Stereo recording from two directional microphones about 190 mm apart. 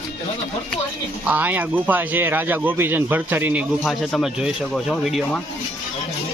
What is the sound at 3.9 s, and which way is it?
Speech, centre (ahead or behind).